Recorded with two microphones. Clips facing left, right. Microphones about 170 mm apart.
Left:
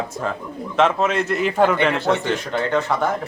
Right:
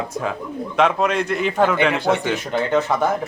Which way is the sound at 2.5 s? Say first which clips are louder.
Right 3 dB; 20° right (ahead or behind).